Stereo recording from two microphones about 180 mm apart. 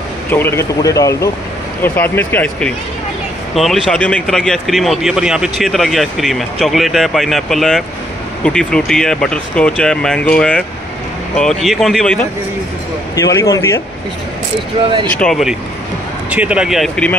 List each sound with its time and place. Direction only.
0.3 s speech: 15° left (ahead or behind)
13.1 s speech: 20° left (ahead or behind)
15.1 s speech: centre (ahead or behind)